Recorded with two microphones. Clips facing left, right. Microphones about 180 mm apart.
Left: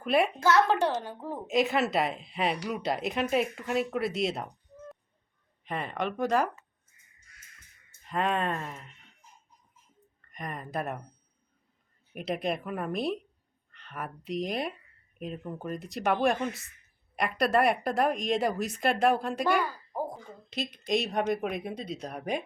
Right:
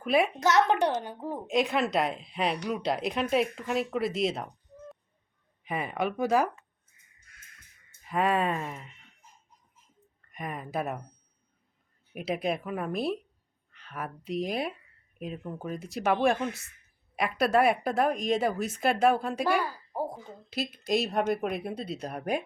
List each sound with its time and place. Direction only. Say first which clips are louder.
0.0 s a woman's voice: even; centre (ahead or behind)
0.3 s a woman's voice: even; 20° right (ahead or behind)
1.5 s a woman's voice: left 1 dB; centre (ahead or behind)
5.6 s speech: right 2 dB; 5° right (ahead or behind)
8.0 s a woman's voice: right 2 dB; 5° right (ahead or behind)
10.2 s a woman's voice: right 2 dB; 5° right (ahead or behind)
12.1 s a woman's voice: right 1 dB; centre (ahead or behind)